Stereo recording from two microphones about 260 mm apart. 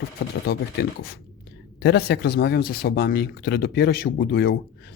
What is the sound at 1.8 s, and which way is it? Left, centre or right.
Speech, left.